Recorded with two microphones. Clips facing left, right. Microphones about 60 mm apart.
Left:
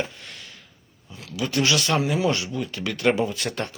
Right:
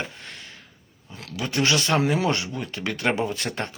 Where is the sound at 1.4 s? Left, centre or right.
Right.